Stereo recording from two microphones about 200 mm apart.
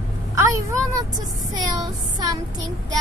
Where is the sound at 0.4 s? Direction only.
15° right (ahead or behind).